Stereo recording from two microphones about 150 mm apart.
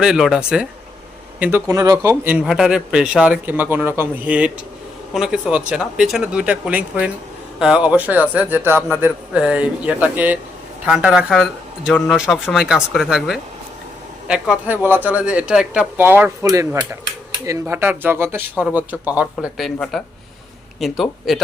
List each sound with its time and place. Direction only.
0.0 s speech: 5° right (ahead or behind)
1.6 s speech: 25° right (ahead or behind)
2.4 s speech: 5° right (ahead or behind)